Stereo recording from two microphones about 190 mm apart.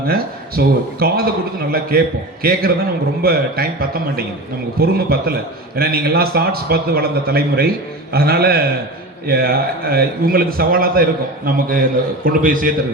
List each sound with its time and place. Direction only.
0.1 s a man's voice: 55° right (ahead or behind)